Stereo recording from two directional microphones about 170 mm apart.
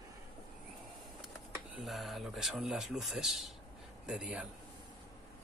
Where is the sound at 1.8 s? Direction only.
Centre (ahead or behind).